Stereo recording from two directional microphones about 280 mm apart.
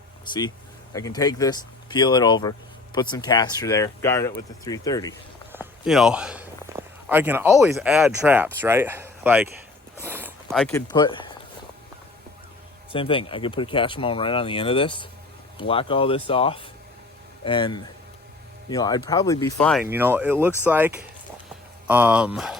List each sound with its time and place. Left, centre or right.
0.3 s speech: centre
5.5 s speech: centre
10.0 s a sound: centre
12.9 s speech: centre
19.8 s speech: centre